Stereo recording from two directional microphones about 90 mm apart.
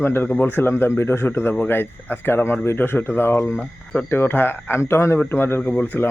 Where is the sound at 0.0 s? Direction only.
20° left (ahead or behind).